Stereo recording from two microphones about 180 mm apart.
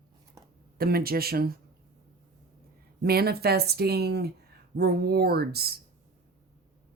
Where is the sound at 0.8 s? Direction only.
55° right (ahead or behind).